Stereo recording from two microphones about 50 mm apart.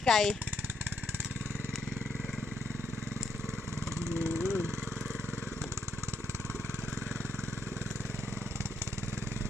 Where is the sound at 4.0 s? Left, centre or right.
Right.